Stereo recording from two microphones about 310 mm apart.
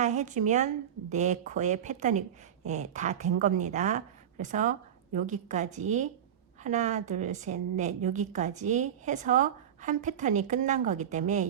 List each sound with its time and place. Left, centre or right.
0.0 s a woman's voice: right